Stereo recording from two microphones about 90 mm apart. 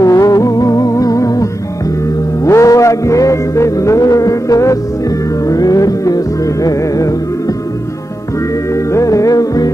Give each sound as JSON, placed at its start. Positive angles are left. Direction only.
{"t": 0.0, "sound": "music", "side_deg": 40}
{"t": 8.7, "sound": "music", "side_deg": 35}